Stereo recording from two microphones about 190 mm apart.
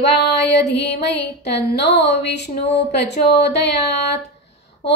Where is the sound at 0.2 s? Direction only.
65° left (ahead or behind).